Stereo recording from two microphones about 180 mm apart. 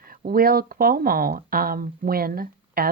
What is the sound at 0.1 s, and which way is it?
Speech, 55° right (ahead or behind).